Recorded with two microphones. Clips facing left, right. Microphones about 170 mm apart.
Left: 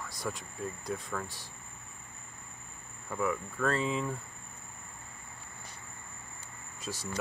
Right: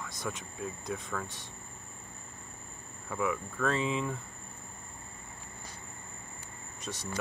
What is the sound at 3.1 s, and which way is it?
Cricket, centre (ahead or behind).